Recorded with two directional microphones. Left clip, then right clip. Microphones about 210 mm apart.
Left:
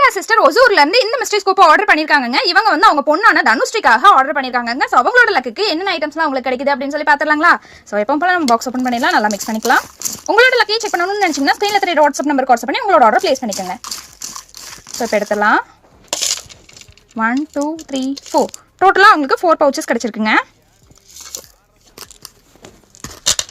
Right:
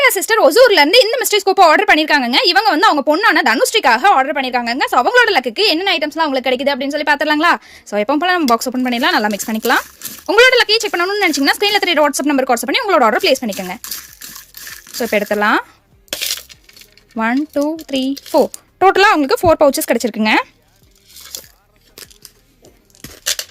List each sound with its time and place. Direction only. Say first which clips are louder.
0.0 s a woman's voice: left 1 dB; 35° right (ahead or behind)
17.2 s a woman's voice: even; 40° right (ahead or behind)